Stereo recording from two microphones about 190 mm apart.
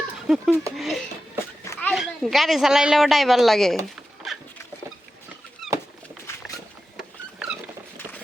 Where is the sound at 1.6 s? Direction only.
15° left (ahead or behind).